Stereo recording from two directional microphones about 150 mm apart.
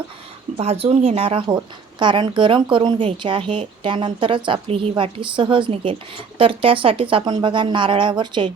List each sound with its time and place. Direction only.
0.5 s speech: 45° right (ahead or behind)